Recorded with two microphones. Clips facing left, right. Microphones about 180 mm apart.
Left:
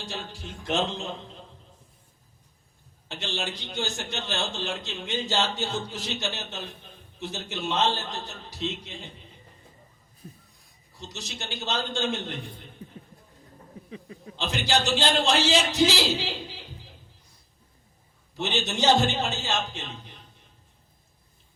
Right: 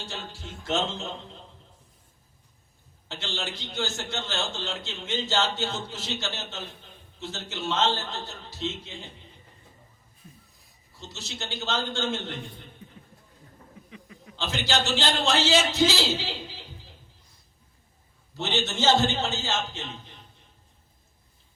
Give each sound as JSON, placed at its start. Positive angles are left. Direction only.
{"t": 0.3, "sound": "a man's voice", "side_deg": 15}
{"t": 3.1, "sound": "a man's voice", "side_deg": 15}
{"t": 11.1, "sound": "a man's voice", "side_deg": 15}
{"t": 12.8, "sound": "a sound", "side_deg": 35}
{"t": 13.9, "sound": "chuckle", "side_deg": 35}
{"t": 14.3, "sound": "a man's voice", "side_deg": 15}
{"t": 18.3, "sound": "a man's voice", "side_deg": 15}